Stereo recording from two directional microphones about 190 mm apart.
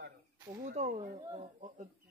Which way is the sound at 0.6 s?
35° right (ahead or behind).